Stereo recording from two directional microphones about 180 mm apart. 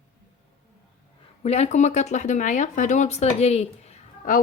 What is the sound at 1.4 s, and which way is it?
Speech, 40° left (ahead or behind).